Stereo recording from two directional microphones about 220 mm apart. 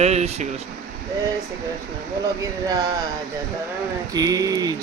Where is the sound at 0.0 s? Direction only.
30° right (ahead or behind).